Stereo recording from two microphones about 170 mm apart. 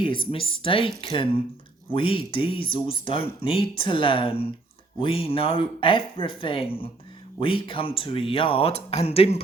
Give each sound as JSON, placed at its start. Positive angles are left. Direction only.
{"t": 0.0, "sound": "speech", "side_deg": 30}